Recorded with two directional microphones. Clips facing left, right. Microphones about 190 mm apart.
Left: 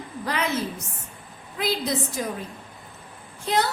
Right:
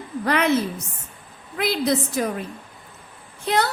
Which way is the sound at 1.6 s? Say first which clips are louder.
Right 4 dB; 65° right (ahead or behind).